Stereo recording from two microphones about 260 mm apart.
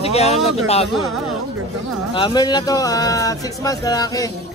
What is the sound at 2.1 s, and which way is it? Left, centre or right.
Speech, centre.